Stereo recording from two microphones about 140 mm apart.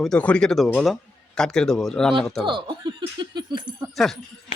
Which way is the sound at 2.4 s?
35° right (ahead or behind).